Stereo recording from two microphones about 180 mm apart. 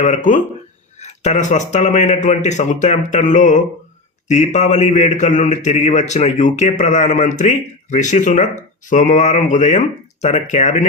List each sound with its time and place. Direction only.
0.0 s a man's voice: 45° left (ahead or behind)